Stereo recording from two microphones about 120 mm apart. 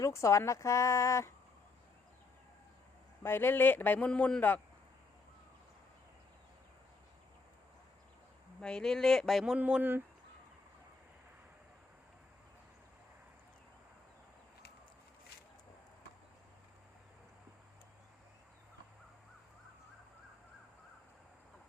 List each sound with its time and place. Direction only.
0.0 s a woman's voice: 25° left (ahead or behind)
3.2 s a man's voice: 20° left (ahead or behind)
8.6 s speech: 5° left (ahead or behind); by 10.0 s 15° right (ahead or behind)